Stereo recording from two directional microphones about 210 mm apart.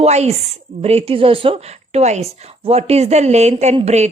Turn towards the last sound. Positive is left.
turn(degrees=-30)  # may be behind; listen again after turning